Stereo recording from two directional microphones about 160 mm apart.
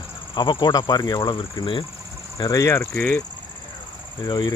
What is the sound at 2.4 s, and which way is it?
Speech, 20° left (ahead or behind).